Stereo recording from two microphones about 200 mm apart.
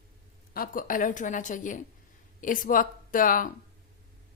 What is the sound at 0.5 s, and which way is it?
A woman's voice, 45° left (ahead or behind).